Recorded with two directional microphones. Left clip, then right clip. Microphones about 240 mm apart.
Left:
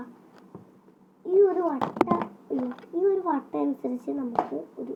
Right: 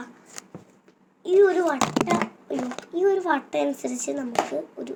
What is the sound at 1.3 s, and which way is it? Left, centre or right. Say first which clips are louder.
Speech: right 3 dB; right.